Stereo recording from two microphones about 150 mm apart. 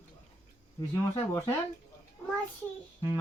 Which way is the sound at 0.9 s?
15° left (ahead or behind).